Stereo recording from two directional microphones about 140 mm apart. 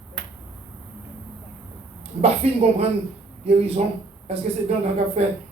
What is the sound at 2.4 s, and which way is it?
Speech, 45° right (ahead or behind).